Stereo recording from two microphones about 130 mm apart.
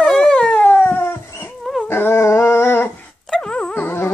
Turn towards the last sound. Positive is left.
turn(degrees=15)  # may be behind; listen again after turning